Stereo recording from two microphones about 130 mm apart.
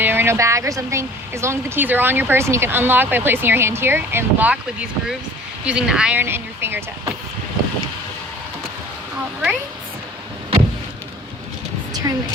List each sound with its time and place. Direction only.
0.0 s speech: 15° right (ahead or behind)
12.1 s a woman's voice: 30° right (ahead or behind)